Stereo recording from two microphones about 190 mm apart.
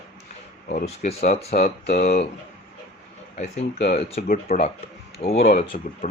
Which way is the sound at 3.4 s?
35° left (ahead or behind).